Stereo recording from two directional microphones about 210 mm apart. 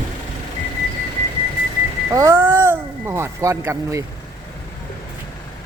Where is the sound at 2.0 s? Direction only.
15° right (ahead or behind).